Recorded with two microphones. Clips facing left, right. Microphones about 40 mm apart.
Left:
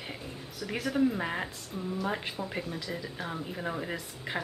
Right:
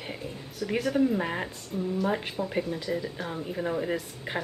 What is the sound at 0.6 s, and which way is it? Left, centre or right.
Speech, centre.